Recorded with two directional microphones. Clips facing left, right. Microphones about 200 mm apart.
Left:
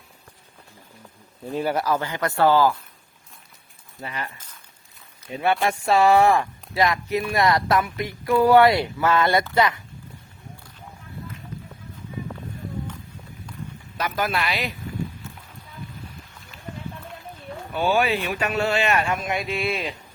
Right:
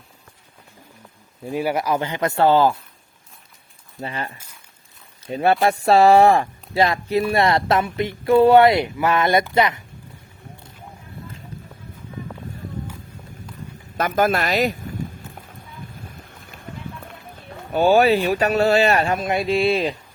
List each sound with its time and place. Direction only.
1.5 s speech: 10° right (ahead or behind)
4.0 s speech: 30° right (ahead or behind)
13.9 s speech: 50° right (ahead or behind)
16.3 s a sound: 55° right (ahead or behind)
17.7 s speech: 40° right (ahead or behind)